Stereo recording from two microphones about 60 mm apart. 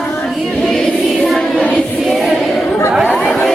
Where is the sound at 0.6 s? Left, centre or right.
Centre.